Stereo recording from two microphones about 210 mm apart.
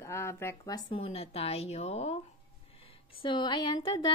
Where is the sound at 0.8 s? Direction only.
30° left (ahead or behind).